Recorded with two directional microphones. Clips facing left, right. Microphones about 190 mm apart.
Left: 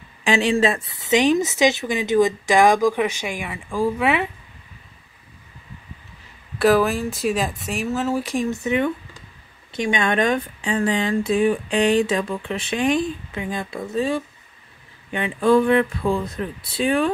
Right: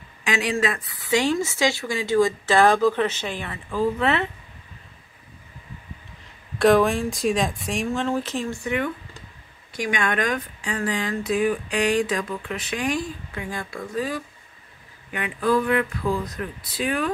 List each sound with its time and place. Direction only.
0.2 s speech: 30° left (ahead or behind); by 4.3 s 10° left (ahead or behind)
6.6 s speech: 5° left (ahead or behind); by 17.1 s 30° left (ahead or behind)